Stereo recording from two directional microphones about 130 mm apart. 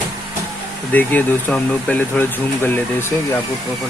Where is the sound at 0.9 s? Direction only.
15° left (ahead or behind).